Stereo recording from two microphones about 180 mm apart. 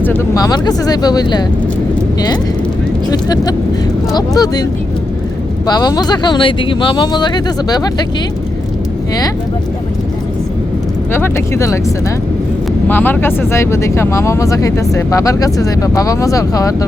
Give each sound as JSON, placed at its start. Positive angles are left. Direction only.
{"t": 0.0, "sound": "speech", "side_deg": 15}
{"t": 3.1, "sound": "speech", "side_deg": 20}
{"t": 5.6, "sound": "speech", "side_deg": 20}
{"t": 11.1, "sound": "speech", "side_deg": 15}
{"t": 12.9, "sound": "speech", "side_deg": 10}